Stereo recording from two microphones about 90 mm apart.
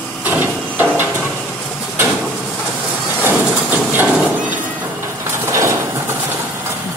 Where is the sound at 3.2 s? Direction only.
20° right (ahead or behind).